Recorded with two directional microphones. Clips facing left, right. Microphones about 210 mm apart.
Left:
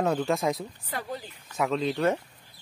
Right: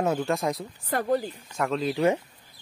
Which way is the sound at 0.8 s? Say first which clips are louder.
Right 11 dB; 55° right (ahead or behind).